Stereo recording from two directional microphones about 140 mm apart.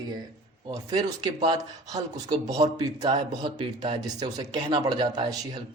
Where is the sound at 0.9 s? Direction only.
30° right (ahead or behind).